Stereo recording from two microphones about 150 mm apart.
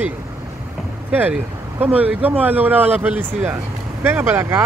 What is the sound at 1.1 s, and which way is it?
A man's voice, 10° right (ahead or behind).